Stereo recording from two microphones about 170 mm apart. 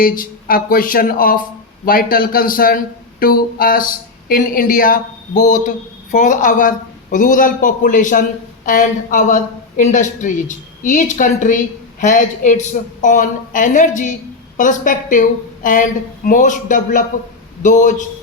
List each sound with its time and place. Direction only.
0.0 s a woman's voice: 55° left (ahead or behind)